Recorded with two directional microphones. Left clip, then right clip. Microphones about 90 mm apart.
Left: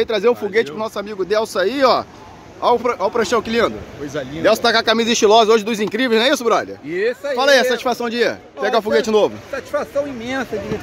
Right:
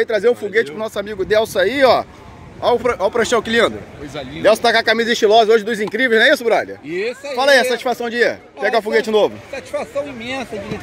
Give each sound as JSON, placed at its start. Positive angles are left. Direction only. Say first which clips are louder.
{"t": 0.0, "sound": "speech", "louder": "right 1 dB", "side_deg": 45}
{"t": 0.8, "sound": "speech", "louder": "right 2 dB", "side_deg": 5}
{"t": 2.8, "sound": "speech", "louder": "right 1 dB", "side_deg": -5}
{"t": 4.4, "sound": "speech", "louder": "right 2 dB", "side_deg": 25}
{"t": 4.8, "sound": "speech", "louder": "even", "side_deg": 50}
{"t": 7.9, "sound": "speech", "louder": "right 1 dB", "side_deg": 55}